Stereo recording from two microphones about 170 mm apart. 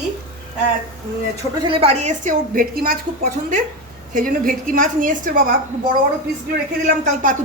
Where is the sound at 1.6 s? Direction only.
35° right (ahead or behind); by 3.0 s 60° right (ahead or behind).